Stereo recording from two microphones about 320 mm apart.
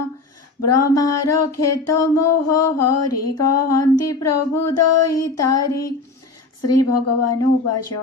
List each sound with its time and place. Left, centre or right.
0.6 s mantra: left